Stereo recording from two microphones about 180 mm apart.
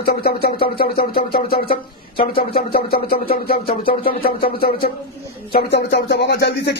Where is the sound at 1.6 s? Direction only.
30° left (ahead or behind).